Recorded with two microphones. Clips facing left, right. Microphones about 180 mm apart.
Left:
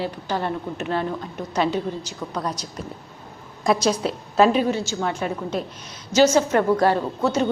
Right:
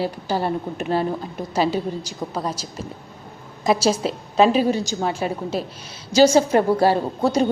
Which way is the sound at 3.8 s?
25° right (ahead or behind).